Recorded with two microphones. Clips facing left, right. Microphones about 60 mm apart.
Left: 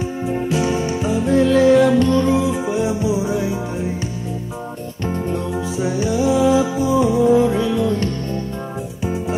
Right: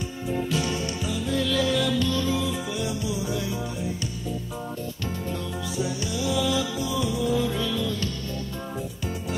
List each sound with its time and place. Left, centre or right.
0.3 s music: left
5.0 s music: left